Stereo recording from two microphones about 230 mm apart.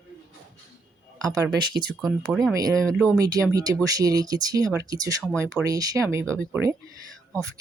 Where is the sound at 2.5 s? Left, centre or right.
Centre.